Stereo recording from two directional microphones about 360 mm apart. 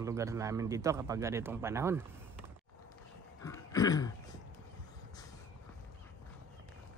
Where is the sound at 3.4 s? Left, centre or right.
Centre.